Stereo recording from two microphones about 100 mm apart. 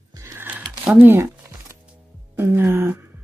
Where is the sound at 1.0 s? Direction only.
25° right (ahead or behind).